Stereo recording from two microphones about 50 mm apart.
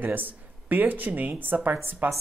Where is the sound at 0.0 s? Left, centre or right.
Right.